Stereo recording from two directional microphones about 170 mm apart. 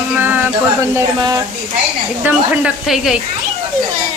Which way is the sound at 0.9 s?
20° right (ahead or behind).